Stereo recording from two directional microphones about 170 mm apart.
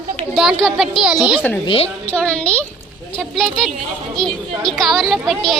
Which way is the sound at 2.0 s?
5° left (ahead or behind).